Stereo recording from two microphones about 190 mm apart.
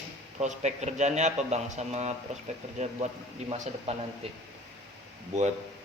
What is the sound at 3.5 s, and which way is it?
Speech, 35° right (ahead or behind).